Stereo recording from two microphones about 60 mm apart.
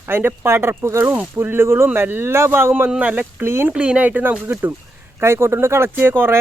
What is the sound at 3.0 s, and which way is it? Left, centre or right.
Speech, right.